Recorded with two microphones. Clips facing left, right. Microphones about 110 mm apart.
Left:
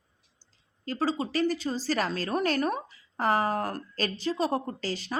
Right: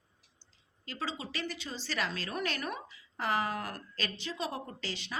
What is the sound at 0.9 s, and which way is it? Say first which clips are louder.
A woman's voice: left 10 dB; 40° left (ahead or behind).